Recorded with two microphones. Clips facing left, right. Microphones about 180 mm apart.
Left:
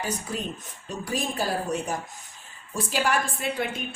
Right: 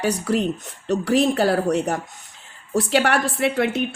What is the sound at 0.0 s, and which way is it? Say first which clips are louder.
A woman's voice: right 10 dB; 75° right (ahead or behind).